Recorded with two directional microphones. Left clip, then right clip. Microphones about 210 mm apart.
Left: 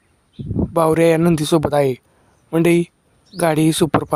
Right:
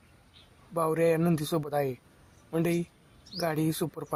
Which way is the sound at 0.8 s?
45° left (ahead or behind).